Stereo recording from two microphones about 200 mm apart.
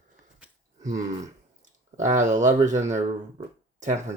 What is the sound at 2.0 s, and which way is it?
Speech, 35° right (ahead or behind).